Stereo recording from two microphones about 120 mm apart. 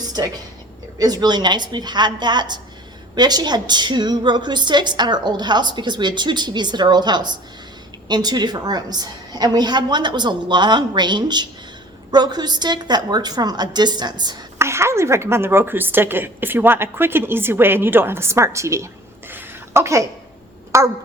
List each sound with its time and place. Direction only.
0.9 s a woman's voice: 35° right (ahead or behind)
14.6 s a woman's voice: 20° right (ahead or behind)
19.3 s a sound: 20° right (ahead or behind)